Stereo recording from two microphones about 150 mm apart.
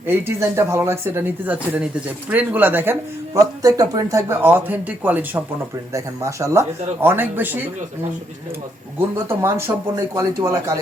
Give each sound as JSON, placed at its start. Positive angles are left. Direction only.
{"t": 0.0, "sound": "speech", "side_deg": -15}
{"t": 9.0, "sound": "speech", "side_deg": -15}